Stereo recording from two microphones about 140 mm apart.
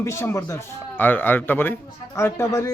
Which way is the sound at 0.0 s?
20° left (ahead or behind).